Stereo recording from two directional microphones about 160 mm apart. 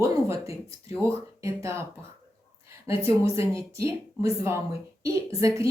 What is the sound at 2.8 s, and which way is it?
Speech, 15° right (ahead or behind).